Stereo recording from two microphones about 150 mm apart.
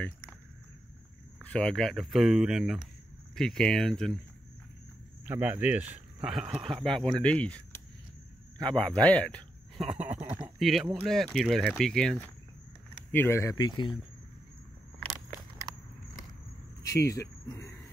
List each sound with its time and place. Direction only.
1.4 s speech: 5° left (ahead or behind)
5.3 s speech: 10° right (ahead or behind); by 7.8 s 10° left (ahead or behind)
8.8 s speech: 10° left (ahead or behind)
9.8 s speech: 10° right (ahead or behind)
10.1 s a sound: 45° right (ahead or behind)
10.6 s speech: centre (ahead or behind)
13.1 s speech: 15° left (ahead or behind)
15.7 s biting: 25° right (ahead or behind)
16.8 s speech: 20° left (ahead or behind)